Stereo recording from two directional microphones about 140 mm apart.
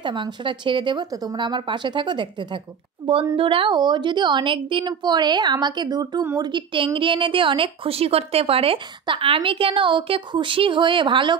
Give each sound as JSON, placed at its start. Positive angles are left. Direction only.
{"t": 0.0, "sound": "a woman's voice", "side_deg": -35}